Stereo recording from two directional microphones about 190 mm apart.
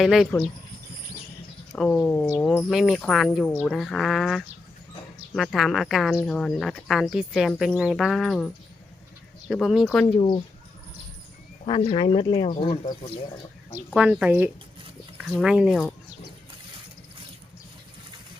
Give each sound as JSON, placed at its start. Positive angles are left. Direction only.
{"t": 0.0, "sound": "speech", "side_deg": 0}
{"t": 1.7, "sound": "speech", "side_deg": 5}
{"t": 10.2, "sound": "speech", "side_deg": 25}
{"t": 11.6, "sound": "speech", "side_deg": 25}
{"t": 13.9, "sound": "speech", "side_deg": -5}